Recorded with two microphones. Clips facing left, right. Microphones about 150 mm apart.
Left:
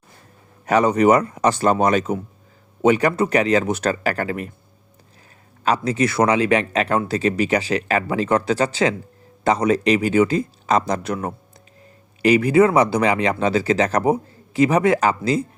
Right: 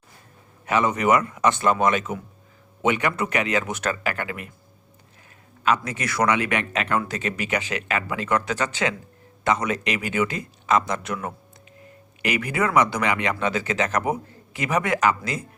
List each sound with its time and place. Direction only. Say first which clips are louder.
0.6 s speech: left 6 dB; 40° left (ahead or behind)
5.6 s speech: left 5 dB; 30° left (ahead or behind)